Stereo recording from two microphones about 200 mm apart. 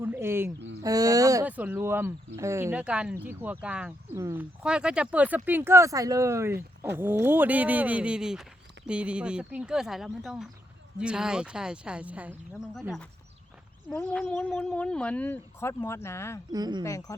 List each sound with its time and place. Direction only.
0.0 s speech: 10° right (ahead or behind); by 16.4 s 15° left (ahead or behind)
16.5 s speech: 20° right (ahead or behind)
16.8 s speech: 15° left (ahead or behind)